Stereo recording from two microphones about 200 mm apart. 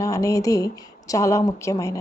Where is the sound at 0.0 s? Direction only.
15° left (ahead or behind).